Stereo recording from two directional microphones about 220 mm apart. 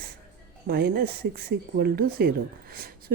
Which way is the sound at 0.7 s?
45° right (ahead or behind).